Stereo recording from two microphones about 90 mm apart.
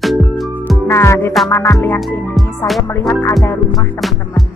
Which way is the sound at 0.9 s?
30° left (ahead or behind).